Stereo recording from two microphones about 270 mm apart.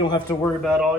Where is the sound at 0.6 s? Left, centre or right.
Centre.